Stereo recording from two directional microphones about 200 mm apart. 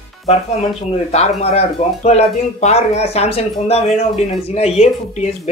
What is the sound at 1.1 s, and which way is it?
A woman's voice, 30° left (ahead or behind).